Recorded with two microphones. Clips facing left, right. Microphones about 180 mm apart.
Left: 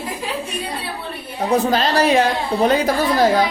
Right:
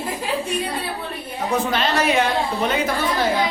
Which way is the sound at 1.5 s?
35° left (ahead or behind).